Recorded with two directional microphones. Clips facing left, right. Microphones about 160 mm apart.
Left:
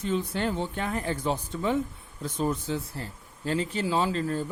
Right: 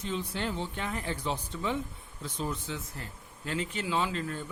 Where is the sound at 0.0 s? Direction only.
50° left (ahead or behind).